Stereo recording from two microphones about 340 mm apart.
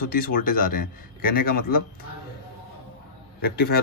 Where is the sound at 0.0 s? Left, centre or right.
Left.